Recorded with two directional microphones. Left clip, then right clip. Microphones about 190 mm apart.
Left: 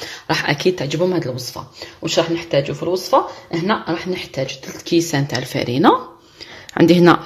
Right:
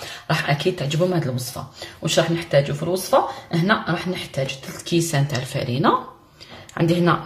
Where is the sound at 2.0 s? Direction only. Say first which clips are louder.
Left 2 dB; 20° left (ahead or behind); by 7.1 s 45° left (ahead or behind).